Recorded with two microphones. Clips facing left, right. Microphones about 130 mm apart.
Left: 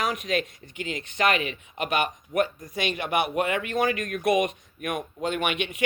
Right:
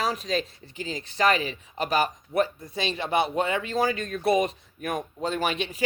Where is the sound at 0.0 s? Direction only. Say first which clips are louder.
Even; 30° right (ahead or behind).